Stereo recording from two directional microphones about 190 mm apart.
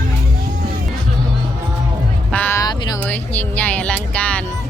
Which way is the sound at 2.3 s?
10° left (ahead or behind).